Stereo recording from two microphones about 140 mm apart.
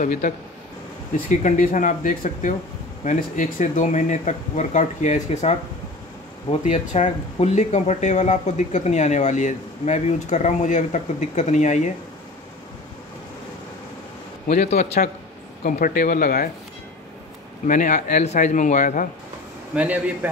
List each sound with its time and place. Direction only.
0.0 s speech: 65° left (ahead or behind)
6.6 s speech: 55° left (ahead or behind)
14.6 s a man's voice: 55° left (ahead or behind)
15.6 s speech: 75° left (ahead or behind)
17.6 s speech: 65° left (ahead or behind)
19.7 s a man's voice: 10° right (ahead or behind)